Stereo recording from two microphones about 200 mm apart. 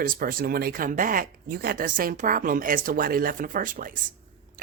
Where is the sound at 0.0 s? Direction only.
45° right (ahead or behind).